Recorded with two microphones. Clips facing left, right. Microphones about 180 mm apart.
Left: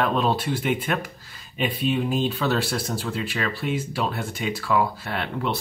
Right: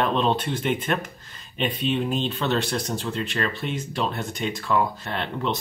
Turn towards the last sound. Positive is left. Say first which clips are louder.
# even
turn(degrees=10)  # may be behind; listen again after turning